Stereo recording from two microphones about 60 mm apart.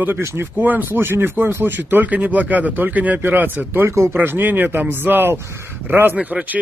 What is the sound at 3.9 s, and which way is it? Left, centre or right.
Speech, right.